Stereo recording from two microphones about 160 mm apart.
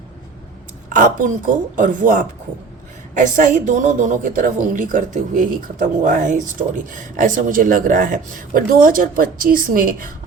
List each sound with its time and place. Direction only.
0.9 s a woman's voice: 55° right (ahead or behind)